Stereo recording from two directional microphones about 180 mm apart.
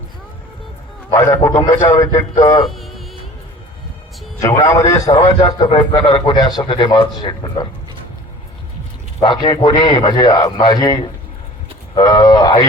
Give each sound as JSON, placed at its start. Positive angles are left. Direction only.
{"t": 1.1, "sound": "a man's voice", "side_deg": 25}
{"t": 2.6, "sound": "music", "side_deg": 0}
{"t": 4.4, "sound": "a man's voice", "side_deg": 15}
{"t": 9.2, "sound": "a man's voice", "side_deg": 25}